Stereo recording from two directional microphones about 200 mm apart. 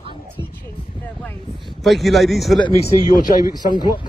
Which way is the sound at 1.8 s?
Centre (ahead or behind).